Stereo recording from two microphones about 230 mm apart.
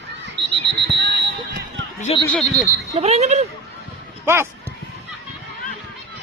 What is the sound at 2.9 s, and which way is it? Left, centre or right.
Speech, right.